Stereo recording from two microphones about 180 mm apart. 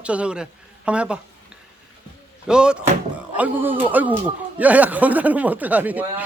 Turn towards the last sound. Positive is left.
turn(degrees=-10)  # may be behind; listen again after turning